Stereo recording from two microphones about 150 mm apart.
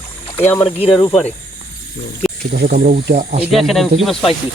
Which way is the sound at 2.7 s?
75° right (ahead or behind).